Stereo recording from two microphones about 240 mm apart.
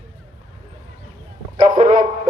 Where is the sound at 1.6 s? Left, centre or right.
Right.